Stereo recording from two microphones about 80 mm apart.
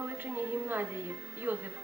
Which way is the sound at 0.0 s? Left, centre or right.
Right.